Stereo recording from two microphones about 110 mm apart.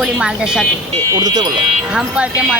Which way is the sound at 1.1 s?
40° right (ahead or behind).